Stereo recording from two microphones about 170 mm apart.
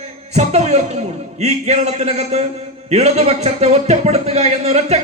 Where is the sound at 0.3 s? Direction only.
40° right (ahead or behind).